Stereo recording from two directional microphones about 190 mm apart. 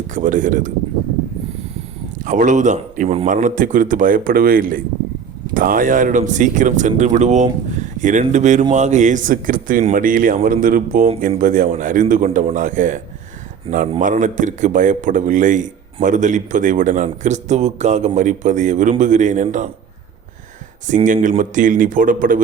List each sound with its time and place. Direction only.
0.1 s speech: 45° right (ahead or behind)
2.2 s a man's voice: 40° right (ahead or behind)
20.8 s speech: 40° right (ahead or behind)